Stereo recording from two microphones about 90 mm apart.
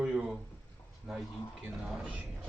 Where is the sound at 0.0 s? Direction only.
10° right (ahead or behind).